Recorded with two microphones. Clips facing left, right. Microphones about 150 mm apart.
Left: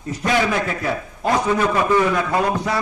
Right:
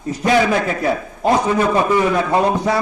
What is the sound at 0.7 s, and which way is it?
A man's voice, 20° right (ahead or behind).